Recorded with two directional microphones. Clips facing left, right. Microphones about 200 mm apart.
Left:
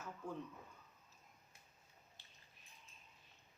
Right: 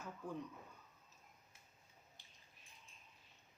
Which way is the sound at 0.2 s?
15° right (ahead or behind).